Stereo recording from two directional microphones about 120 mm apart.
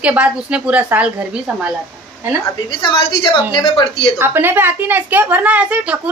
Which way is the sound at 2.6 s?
45° left (ahead or behind).